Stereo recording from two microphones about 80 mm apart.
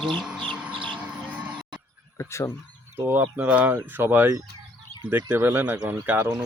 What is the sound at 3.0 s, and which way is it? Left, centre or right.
Speech, right.